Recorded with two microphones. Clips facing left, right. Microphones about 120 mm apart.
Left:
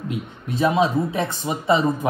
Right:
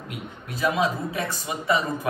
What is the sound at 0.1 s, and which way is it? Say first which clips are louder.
Speech: left 6 dB; 25° left (ahead or behind).